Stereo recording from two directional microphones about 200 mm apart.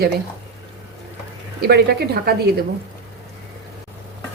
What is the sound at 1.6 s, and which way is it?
Speech, 55° right (ahead or behind).